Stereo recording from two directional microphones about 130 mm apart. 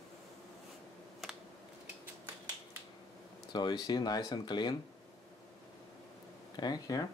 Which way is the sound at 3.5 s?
35° left (ahead or behind).